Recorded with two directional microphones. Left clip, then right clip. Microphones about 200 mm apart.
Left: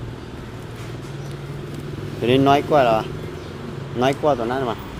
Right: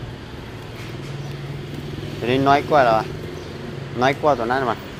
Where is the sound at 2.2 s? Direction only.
30° left (ahead or behind).